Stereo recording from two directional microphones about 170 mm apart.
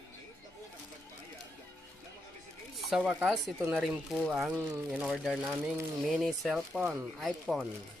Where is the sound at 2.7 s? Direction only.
Centre (ahead or behind).